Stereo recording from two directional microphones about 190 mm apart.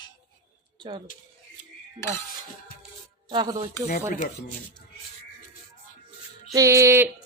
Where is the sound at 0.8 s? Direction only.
25° right (ahead or behind).